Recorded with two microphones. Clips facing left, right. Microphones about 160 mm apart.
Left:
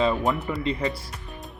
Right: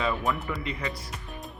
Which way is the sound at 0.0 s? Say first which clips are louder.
Left 5 dB; 25° left (ahead or behind).